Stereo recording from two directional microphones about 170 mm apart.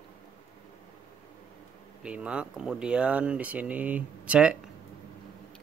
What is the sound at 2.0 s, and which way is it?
Speech, 5° right (ahead or behind).